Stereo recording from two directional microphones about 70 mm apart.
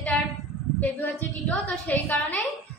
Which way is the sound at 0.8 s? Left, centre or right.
Left.